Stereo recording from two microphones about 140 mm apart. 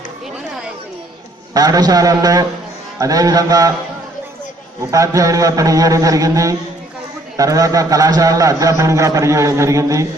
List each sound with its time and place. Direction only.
1.5 s a man's voice: 25° right (ahead or behind)
4.9 s a man's voice: 25° right (ahead or behind)